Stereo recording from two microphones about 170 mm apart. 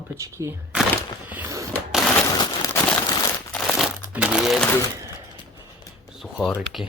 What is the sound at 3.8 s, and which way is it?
Crumpling, 5° right (ahead or behind).